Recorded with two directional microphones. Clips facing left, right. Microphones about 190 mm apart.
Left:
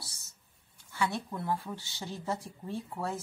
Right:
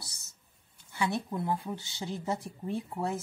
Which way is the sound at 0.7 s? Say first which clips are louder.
Right 1 dB; 20° right (ahead or behind).